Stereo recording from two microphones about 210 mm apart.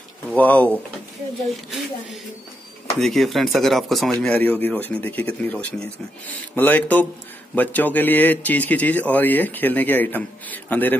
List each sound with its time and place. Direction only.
0.3 s a man's voice: 5° left (ahead or behind)
3.0 s a man's voice: centre (ahead or behind)